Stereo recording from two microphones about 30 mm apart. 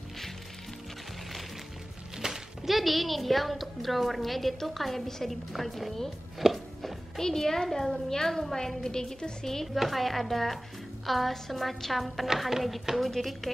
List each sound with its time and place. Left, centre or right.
2.2 s a sound: centre
2.7 s a woman's voice: centre
6.4 s music: centre
7.2 s a child's voice: centre
9.8 s a woman's voice: centre
13.1 s a child's voice: centre